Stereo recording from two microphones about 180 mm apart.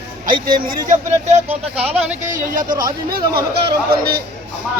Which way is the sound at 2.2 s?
50° right (ahead or behind).